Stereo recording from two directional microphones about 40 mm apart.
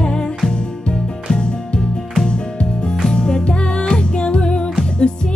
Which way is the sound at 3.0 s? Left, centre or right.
Centre.